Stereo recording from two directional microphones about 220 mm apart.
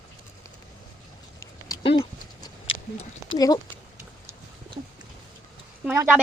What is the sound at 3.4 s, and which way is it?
Speech, 15° left (ahead or behind).